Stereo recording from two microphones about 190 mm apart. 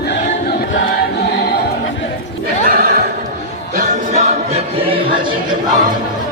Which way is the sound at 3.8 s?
35° right (ahead or behind).